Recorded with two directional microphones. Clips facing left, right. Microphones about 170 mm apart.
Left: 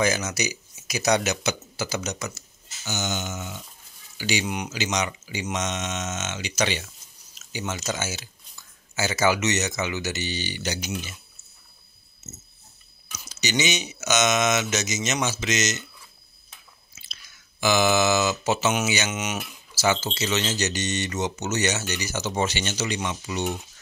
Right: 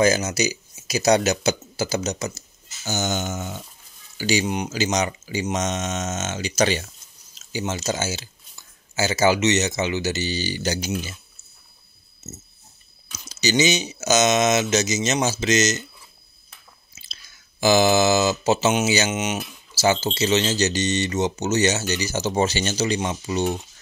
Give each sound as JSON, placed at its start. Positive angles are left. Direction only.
{"t": 0.0, "sound": "speech", "side_deg": -30}
{"t": 13.3, "sound": "speech", "side_deg": -35}
{"t": 17.0, "sound": "speech", "side_deg": -35}